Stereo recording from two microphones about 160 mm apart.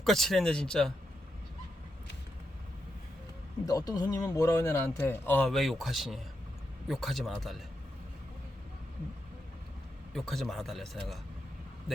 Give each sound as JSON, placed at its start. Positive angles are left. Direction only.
{"t": 0.0, "sound": "speech", "side_deg": 0}
{"t": 3.7, "sound": "speech", "side_deg": 25}
{"t": 5.5, "sound": "speech", "side_deg": 0}
{"t": 10.2, "sound": "speech", "side_deg": 0}